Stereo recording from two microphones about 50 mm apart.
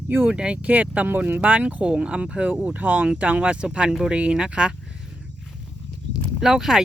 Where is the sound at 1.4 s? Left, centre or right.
Right.